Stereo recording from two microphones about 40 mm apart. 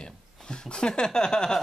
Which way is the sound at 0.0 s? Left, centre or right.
Left.